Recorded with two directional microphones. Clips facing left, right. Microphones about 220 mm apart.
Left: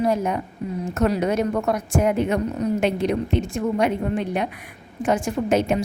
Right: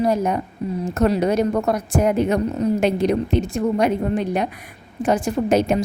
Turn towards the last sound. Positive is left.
turn(degrees=-40)  # may be behind; listen again after turning